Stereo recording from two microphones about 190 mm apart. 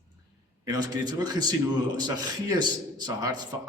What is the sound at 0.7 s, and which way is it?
A man's voice, 20° right (ahead or behind).